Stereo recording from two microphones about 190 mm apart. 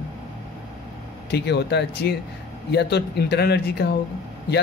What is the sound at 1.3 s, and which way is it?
Speech, 60° left (ahead or behind).